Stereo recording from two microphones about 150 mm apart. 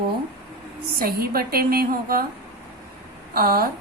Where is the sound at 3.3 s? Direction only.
85° right.